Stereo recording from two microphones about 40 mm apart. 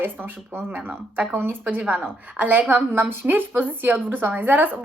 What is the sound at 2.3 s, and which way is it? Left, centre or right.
Speech, right.